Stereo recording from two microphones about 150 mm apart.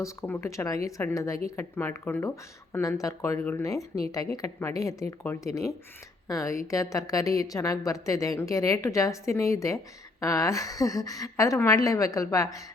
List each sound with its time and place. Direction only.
0.0 s a woman's voice: 20° left (ahead or behind)